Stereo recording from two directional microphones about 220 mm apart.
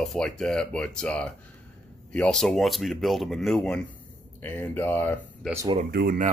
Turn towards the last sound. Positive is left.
turn(degrees=-45)  # may be behind; listen again after turning